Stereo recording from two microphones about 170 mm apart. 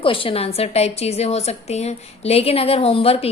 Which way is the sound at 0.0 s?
30° left (ahead or behind).